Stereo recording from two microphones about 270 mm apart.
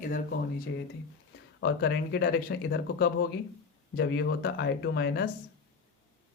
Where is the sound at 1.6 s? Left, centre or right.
Left.